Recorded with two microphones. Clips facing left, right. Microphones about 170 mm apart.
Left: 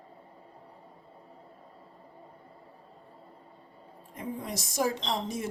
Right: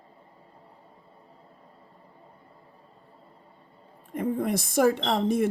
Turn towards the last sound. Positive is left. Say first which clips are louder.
# right 8 dB
turn(degrees=-55)  # may be behind; listen again after turning